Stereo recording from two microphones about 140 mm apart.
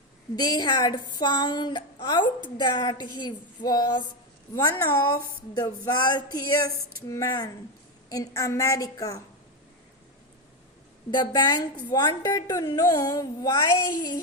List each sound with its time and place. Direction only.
0.3 s a woman's voice: 30° left (ahead or behind)
11.3 s a woman's voice: 30° left (ahead or behind)